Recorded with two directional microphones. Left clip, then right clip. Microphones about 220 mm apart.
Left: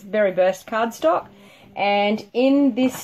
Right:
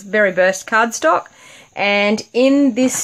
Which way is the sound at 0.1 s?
20° right (ahead or behind).